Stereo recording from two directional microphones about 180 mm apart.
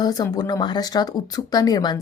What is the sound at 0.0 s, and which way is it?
Speech, 20° left (ahead or behind).